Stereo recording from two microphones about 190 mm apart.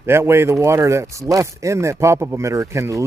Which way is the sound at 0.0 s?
15° right (ahead or behind).